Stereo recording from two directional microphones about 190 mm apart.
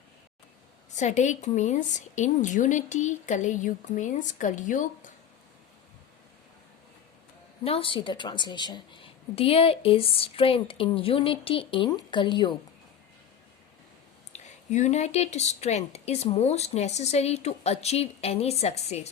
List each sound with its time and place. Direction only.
0.9 s a woman's voice: 40° left (ahead or behind)
7.6 s a woman's voice: 30° left (ahead or behind)
14.3 s a woman's voice: 35° left (ahead or behind)